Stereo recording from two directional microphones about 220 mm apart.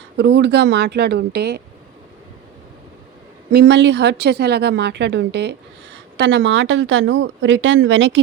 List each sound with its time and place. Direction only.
0.2 s a woman's voice: 50° right (ahead or behind)
3.5 s a woman's voice: 50° right (ahead or behind)